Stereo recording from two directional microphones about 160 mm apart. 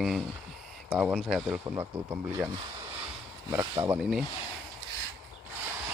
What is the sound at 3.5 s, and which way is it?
Speech, 15° right (ahead or behind).